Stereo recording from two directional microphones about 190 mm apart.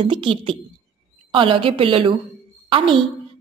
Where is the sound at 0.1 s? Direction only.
25° right (ahead or behind).